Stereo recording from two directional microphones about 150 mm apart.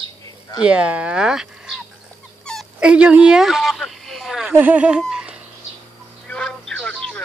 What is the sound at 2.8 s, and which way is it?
Speech, 5° right (ahead or behind).